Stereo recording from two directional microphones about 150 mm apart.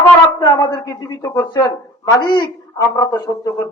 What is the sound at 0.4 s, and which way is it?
A woman's voice, 30° left (ahead or behind).